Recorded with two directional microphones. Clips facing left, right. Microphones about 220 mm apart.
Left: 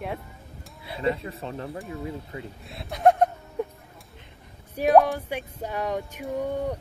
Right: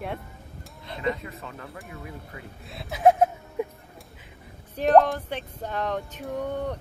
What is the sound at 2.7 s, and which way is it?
Chuckle, centre (ahead or behind).